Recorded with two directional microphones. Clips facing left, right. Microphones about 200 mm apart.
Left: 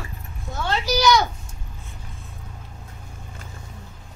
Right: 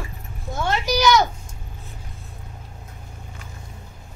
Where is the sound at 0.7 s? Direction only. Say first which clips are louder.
Right 1 dB; 15° right (ahead or behind).